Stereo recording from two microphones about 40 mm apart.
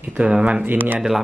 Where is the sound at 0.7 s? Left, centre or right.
Right.